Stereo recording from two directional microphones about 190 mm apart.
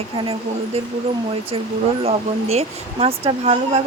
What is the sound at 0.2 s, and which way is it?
A woman's voice, 30° right (ahead or behind).